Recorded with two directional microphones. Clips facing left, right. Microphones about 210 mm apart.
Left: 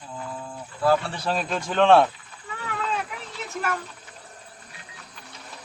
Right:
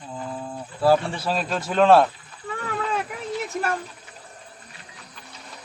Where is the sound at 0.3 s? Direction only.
30° right (ahead or behind).